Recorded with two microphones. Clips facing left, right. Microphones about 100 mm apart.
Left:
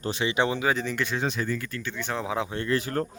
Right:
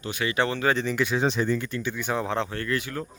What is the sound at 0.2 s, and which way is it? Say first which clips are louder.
Speech: right 1 dB; 20° left (ahead or behind).